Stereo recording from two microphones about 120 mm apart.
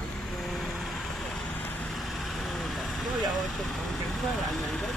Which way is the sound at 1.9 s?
Centre (ahead or behind).